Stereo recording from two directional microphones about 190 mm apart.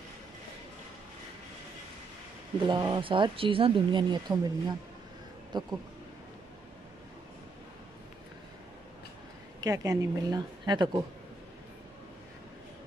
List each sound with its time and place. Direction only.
2.7 s speech: 20° right (ahead or behind)
9.6 s speech: 20° right (ahead or behind)